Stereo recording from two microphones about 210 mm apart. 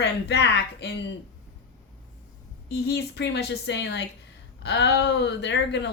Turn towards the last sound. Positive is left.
turn(degrees=55)  # may be behind; listen again after turning